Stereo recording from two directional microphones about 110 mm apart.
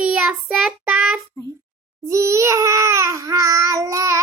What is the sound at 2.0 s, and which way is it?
Speech, 25° right (ahead or behind).